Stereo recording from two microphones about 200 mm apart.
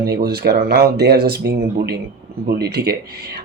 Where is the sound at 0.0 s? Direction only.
50° right (ahead or behind).